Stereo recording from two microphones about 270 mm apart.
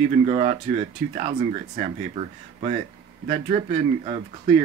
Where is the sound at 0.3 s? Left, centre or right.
Right.